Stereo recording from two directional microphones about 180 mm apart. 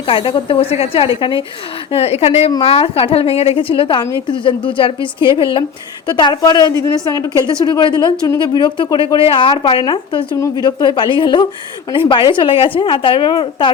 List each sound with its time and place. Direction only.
0.1 s a woman's voice: 30° left (ahead or behind)